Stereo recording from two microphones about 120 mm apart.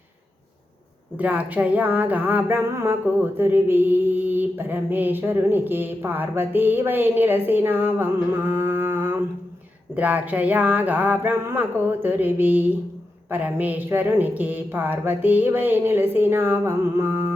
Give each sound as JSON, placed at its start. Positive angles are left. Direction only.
{"t": 1.1, "sound": "music", "side_deg": -10}